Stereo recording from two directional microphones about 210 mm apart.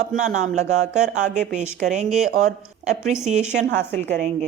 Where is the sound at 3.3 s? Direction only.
35° right (ahead or behind).